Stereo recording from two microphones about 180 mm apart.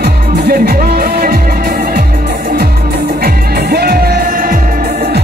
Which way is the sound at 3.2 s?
60° right (ahead or behind).